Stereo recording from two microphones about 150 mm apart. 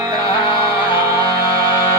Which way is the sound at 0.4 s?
35° left (ahead or behind).